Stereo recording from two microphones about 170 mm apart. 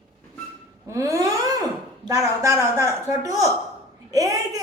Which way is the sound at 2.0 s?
20° right (ahead or behind).